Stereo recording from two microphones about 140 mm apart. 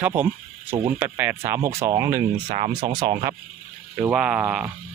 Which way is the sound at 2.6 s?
45° right (ahead or behind).